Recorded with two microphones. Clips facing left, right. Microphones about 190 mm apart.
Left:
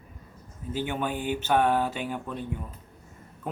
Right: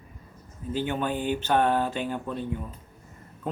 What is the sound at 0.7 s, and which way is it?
Speech, 10° left (ahead or behind).